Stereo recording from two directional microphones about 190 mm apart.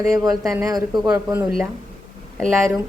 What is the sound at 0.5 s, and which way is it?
Speech, 20° right (ahead or behind).